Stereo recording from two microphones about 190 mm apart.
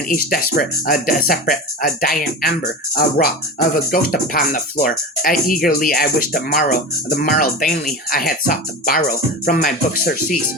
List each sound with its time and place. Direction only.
0.1 s speech: 45° left (ahead or behind)